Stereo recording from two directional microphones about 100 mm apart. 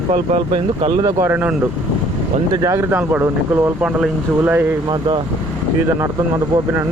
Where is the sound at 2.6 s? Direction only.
30° right (ahead or behind).